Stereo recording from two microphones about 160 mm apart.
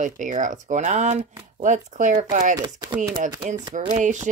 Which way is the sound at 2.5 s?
25° right (ahead or behind).